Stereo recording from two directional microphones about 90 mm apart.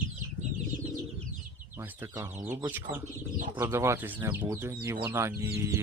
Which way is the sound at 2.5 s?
20° right (ahead or behind).